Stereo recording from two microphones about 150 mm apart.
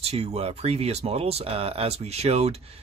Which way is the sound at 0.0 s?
45° right (ahead or behind).